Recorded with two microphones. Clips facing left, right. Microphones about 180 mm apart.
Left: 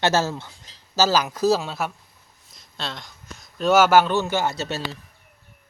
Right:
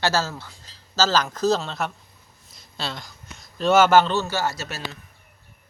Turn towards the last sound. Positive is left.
turn(degrees=25)  # may be behind; listen again after turning